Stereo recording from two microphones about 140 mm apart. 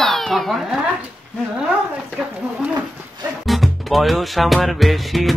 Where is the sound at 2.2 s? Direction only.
5° right (ahead or behind).